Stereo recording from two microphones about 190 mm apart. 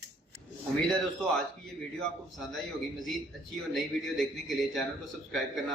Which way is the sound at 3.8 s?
Centre (ahead or behind).